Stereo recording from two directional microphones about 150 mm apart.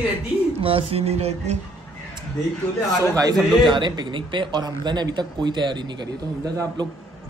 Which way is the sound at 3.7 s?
30° right (ahead or behind).